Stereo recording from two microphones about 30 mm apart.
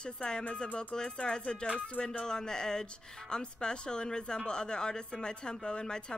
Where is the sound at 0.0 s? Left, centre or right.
Left.